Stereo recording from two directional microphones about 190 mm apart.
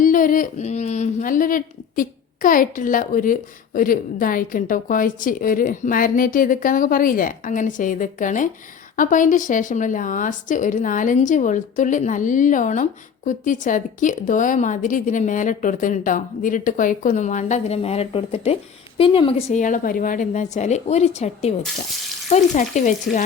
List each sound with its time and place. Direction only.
0.0 s a woman's voice: 45° left (ahead or behind)